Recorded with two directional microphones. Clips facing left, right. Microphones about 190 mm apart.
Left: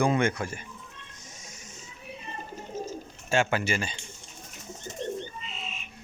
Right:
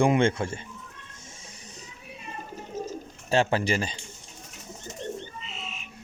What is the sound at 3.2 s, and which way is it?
Speech, 35° right (ahead or behind).